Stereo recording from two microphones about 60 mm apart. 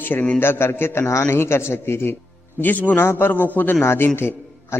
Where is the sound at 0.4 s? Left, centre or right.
Left.